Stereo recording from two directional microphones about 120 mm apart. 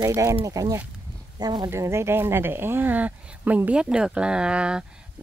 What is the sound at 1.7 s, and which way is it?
Speech, 20° right (ahead or behind).